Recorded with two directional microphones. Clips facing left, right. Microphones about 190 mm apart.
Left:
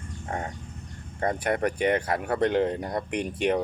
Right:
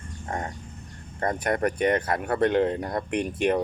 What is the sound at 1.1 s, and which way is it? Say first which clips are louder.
Speech: even; 10° left (ahead or behind).